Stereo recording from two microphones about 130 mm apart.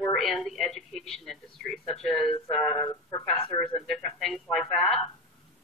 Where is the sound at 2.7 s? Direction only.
20° left (ahead or behind).